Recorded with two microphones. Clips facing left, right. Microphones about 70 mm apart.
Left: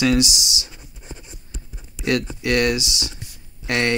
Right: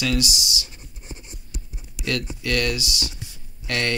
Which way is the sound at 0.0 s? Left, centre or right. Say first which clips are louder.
Left 6 dB; left.